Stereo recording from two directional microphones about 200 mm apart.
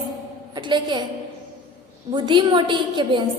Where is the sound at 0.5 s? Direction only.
25° right (ahead or behind).